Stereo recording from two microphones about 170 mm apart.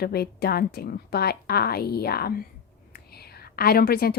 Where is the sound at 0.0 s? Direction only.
70° left (ahead or behind).